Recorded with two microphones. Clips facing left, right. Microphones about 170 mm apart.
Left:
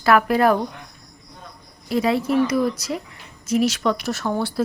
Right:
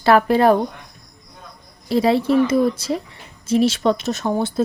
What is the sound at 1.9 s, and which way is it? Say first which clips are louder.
Speech: right 4 dB; 30° right (ahead or behind).